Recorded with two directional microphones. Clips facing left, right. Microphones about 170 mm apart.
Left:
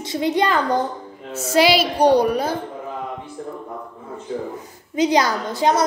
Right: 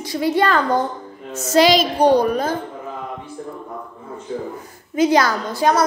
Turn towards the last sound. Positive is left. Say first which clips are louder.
# right 1 dB
turn(degrees=20)  # may be behind; listen again after turning